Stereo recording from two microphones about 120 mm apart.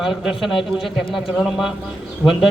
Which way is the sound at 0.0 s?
5° right (ahead or behind).